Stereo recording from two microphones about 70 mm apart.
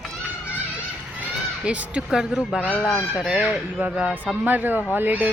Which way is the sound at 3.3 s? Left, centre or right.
Centre.